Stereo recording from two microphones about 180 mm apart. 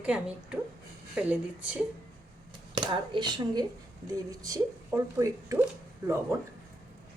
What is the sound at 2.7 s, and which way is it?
A woman's voice, 25° right (ahead or behind).